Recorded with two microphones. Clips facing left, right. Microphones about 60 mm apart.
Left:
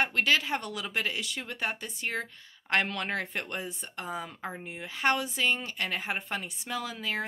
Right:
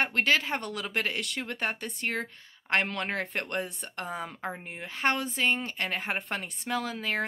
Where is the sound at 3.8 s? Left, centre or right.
Right.